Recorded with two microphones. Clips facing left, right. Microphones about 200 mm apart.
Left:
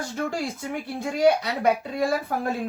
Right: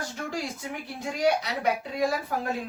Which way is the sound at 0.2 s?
55° left (ahead or behind).